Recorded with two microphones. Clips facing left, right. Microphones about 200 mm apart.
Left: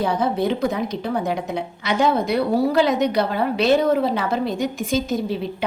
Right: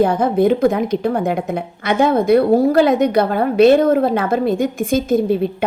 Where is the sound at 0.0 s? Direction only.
50° right (ahead or behind).